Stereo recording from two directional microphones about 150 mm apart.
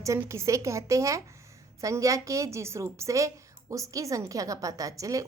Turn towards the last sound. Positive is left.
turn(degrees=-20)  # may be behind; listen again after turning